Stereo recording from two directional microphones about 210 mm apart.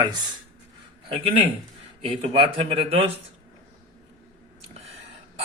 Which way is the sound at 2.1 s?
25° right (ahead or behind).